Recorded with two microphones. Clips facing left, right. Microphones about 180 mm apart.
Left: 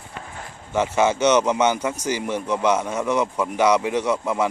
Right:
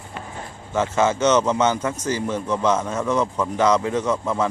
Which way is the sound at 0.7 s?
10° left (ahead or behind).